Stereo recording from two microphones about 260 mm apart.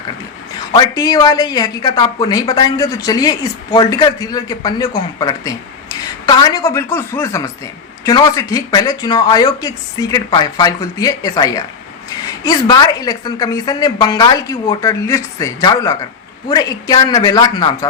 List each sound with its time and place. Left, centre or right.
0.7 s speech: centre